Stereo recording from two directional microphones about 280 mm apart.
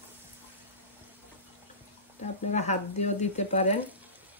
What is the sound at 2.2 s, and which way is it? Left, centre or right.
Speech, left.